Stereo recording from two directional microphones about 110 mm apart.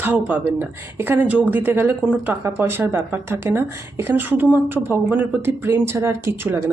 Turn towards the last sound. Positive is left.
turn(degrees=-25)  # may be behind; listen again after turning